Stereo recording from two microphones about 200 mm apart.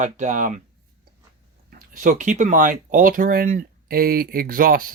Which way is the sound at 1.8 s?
45° right (ahead or behind).